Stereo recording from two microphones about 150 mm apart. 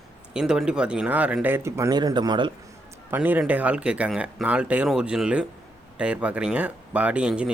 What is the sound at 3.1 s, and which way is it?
Speech, 10° right (ahead or behind).